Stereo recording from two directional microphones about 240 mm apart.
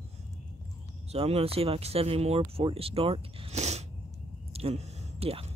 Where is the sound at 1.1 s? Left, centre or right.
Right.